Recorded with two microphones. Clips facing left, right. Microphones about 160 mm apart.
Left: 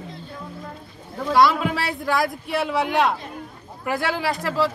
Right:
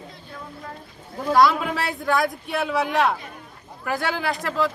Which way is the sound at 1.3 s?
Centre (ahead or behind).